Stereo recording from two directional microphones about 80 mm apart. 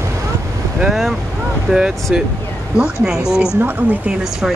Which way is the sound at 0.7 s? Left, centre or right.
Centre.